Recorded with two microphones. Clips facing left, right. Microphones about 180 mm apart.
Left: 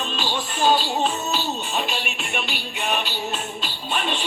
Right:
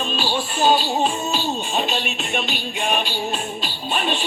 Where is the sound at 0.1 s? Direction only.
10° right (ahead or behind).